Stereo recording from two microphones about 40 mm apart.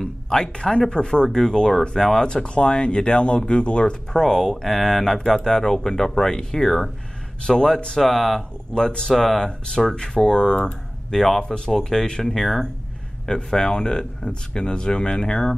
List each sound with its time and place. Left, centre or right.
0.0 s speech: centre
2.2 s speech: left
4.2 s speech: centre
8.0 s speech: centre
8.4 s speech: centre
11.4 s speech: left
11.7 s speech: centre
13.3 s speech: centre